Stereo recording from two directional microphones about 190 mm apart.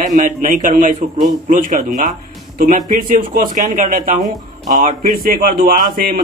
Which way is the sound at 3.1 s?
45° right (ahead or behind).